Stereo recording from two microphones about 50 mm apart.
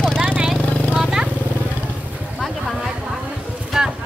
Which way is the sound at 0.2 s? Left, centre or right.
Right.